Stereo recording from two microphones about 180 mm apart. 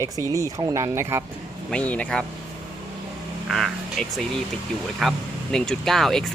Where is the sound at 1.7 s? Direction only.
5° left (ahead or behind).